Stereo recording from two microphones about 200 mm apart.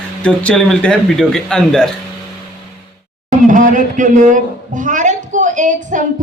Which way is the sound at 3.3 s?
40° right (ahead or behind).